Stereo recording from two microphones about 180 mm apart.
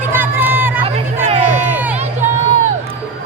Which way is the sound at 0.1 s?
10° right (ahead or behind).